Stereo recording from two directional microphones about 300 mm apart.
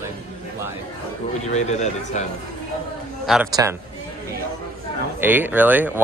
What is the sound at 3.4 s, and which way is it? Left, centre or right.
Speech, centre.